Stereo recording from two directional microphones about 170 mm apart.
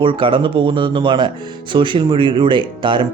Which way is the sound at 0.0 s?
30° right (ahead or behind).